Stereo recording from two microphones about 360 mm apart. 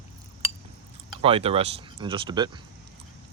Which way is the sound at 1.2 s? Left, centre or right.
Centre.